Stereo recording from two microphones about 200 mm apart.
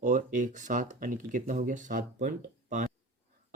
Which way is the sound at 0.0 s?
40° right (ahead or behind).